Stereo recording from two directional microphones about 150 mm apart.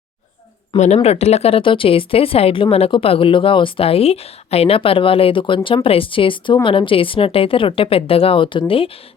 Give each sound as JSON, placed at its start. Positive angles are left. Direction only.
{"t": 0.9, "sound": "speech", "side_deg": 45}